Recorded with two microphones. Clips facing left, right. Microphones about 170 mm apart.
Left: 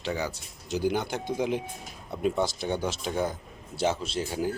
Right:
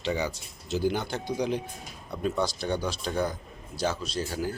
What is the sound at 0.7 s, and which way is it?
Speech, 15° left (ahead or behind).